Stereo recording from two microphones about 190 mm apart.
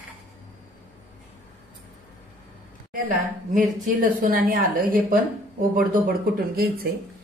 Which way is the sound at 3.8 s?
45° right (ahead or behind).